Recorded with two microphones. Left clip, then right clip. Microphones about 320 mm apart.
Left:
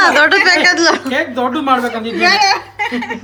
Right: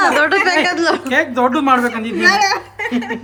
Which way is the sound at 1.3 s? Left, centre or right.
Right.